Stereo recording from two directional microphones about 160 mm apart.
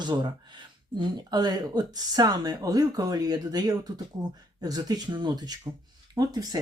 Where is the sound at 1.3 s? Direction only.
25° right (ahead or behind).